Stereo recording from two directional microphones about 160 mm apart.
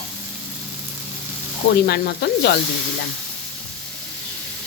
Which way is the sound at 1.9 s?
85° left.